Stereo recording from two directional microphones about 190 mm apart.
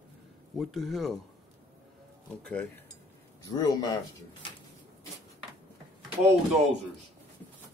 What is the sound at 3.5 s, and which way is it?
Speech, 20° left (ahead or behind).